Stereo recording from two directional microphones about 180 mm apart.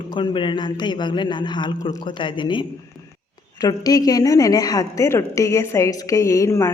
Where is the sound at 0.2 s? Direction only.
25° left (ahead or behind).